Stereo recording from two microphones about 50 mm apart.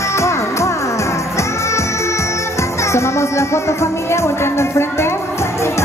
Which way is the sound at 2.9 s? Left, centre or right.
Left.